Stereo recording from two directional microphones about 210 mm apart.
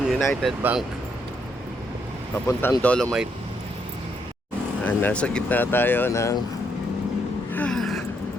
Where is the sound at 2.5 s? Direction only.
10° left (ahead or behind).